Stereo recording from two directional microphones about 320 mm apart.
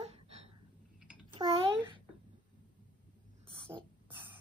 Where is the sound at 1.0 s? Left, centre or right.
Centre.